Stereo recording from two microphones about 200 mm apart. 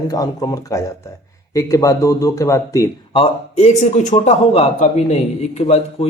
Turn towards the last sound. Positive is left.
turn(degrees=30)  # may be behind; listen again after turning